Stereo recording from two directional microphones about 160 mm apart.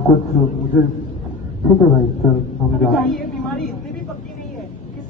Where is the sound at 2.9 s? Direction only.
Centre (ahead or behind).